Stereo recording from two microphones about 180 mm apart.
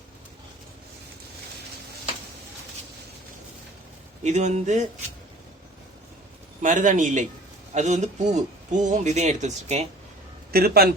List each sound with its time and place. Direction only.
4.2 s speech: 40° right (ahead or behind)
6.6 s a man's voice: 45° right (ahead or behind)
10.5 s a man's voice: 60° right (ahead or behind)